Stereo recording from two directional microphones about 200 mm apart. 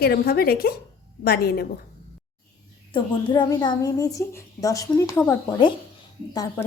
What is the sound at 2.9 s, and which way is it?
A woman's voice, 25° left (ahead or behind).